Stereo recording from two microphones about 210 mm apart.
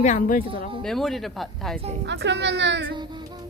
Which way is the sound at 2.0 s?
55° right (ahead or behind).